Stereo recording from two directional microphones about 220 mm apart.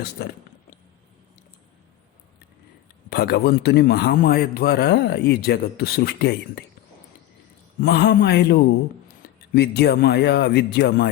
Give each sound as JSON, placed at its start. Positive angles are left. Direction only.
{"t": 3.1, "sound": "a man's voice", "side_deg": 45}
{"t": 7.8, "sound": "a man's voice", "side_deg": 45}
{"t": 9.2, "sound": "a sound", "side_deg": 45}
{"t": 9.6, "sound": "a man's voice", "side_deg": 45}